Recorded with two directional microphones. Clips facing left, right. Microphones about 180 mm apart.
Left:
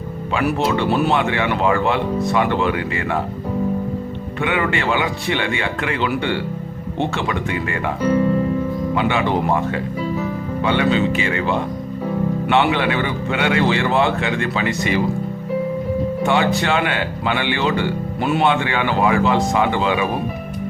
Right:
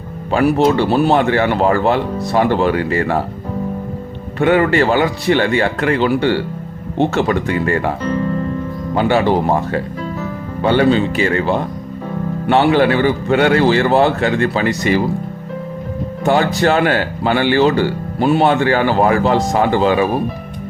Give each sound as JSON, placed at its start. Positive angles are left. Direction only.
{"t": 0.6, "sound": "speech", "side_deg": -35}
{"t": 4.4, "sound": "speech", "side_deg": -40}
{"t": 8.0, "sound": "music", "side_deg": 10}
{"t": 9.0, "sound": "speech", "side_deg": -35}
{"t": 16.2, "sound": "speech", "side_deg": -40}